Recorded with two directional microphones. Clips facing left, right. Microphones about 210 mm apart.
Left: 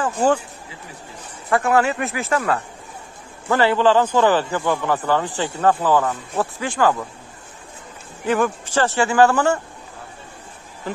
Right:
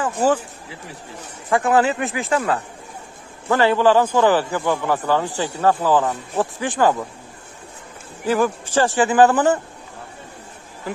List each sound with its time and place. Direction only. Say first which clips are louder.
0.0 s speech: even; 5° right (ahead or behind)
1.5 s speech: right 1 dB; 15° right (ahead or behind)
3.6 s speech: right 1 dB; 15° right (ahead or behind)
8.3 s speech: right 1 dB; 10° right (ahead or behind)